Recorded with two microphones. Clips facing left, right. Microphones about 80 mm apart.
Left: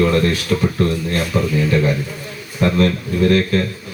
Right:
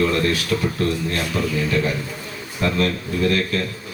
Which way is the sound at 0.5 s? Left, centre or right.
Left.